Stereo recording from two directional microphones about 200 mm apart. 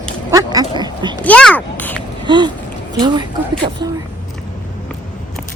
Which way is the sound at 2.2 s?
25° right (ahead or behind).